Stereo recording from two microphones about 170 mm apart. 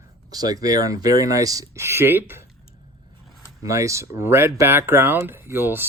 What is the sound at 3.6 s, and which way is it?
Speech, 20° right (ahead or behind).